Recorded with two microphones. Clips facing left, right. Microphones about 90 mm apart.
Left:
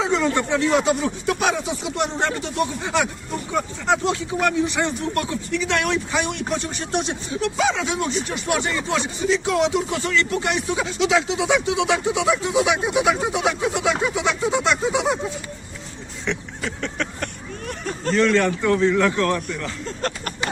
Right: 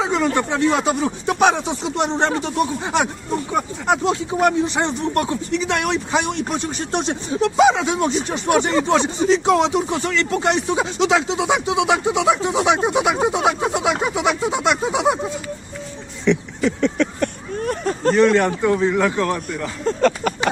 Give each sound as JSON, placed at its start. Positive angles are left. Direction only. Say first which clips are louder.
{"t": 0.0, "sound": "a man's voice", "louder": "right 1 dB", "side_deg": -20}
{"t": 17.7, "sound": "a sound", "louder": "right 8 dB", "side_deg": -40}
{"t": 18.1, "sound": "a man's voice", "louder": "right 3 dB", "side_deg": -20}